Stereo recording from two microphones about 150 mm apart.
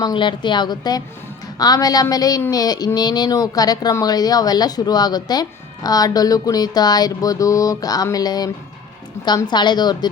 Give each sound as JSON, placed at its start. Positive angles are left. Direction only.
{"t": 0.0, "sound": "a woman's voice", "side_deg": 30}